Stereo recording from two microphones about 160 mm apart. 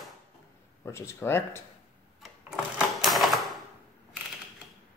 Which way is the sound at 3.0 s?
Centre (ahead or behind).